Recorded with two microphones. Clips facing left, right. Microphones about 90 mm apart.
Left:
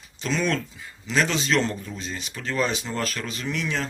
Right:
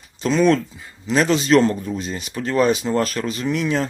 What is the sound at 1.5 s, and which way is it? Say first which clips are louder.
Speech: right 9 dB; 30° right (ahead or behind).